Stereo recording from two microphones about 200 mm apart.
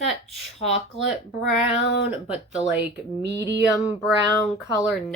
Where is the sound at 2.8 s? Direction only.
60° right (ahead or behind).